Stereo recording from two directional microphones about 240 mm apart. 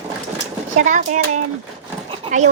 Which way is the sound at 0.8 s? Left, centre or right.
Right.